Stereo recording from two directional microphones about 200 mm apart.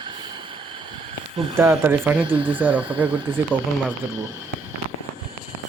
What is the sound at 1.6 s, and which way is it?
Speech, 10° right (ahead or behind).